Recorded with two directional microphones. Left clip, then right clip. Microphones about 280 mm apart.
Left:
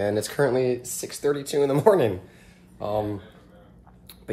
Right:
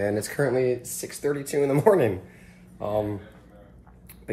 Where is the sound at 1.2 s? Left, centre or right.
Centre.